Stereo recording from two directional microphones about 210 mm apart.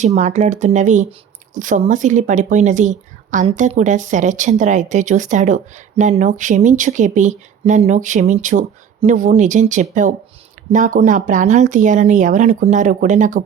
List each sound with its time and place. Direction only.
0.0 s speech: 35° right (ahead or behind)